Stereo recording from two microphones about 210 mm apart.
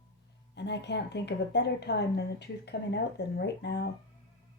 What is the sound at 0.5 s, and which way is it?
A woman's voice, 55° left (ahead or behind).